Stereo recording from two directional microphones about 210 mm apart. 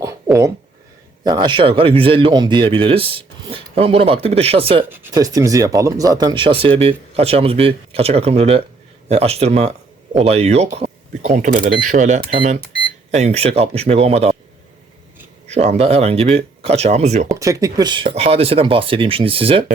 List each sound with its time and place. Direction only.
1.2 s speech: 20° right (ahead or behind)
4.9 s speech: 10° right (ahead or behind); by 14.3 s 30° right (ahead or behind)
15.4 s speech: 30° right (ahead or behind)
17.4 s speech: 15° right (ahead or behind)